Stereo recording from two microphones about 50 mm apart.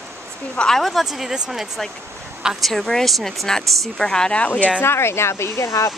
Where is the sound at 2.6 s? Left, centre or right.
Centre.